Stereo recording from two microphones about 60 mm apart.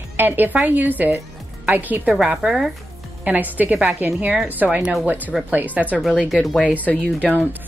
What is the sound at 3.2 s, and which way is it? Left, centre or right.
A woman's voice, right.